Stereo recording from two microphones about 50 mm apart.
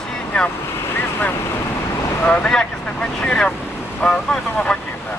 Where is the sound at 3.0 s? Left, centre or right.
Centre.